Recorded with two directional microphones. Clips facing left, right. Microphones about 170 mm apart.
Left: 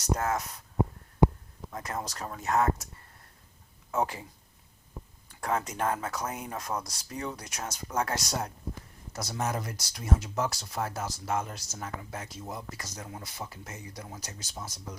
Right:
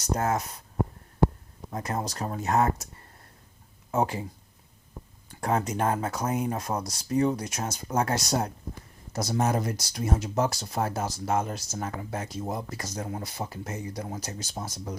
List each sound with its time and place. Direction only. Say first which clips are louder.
0.2 s speech: right 3 dB; 30° right (ahead or behind)
1.2 s a sound: even; 15° left (ahead or behind)
1.7 s speech: right 5 dB; 30° right (ahead or behind)
3.9 s speech: right 4 dB; 30° right (ahead or behind)
5.4 s speech: right 4 dB; 30° right (ahead or behind)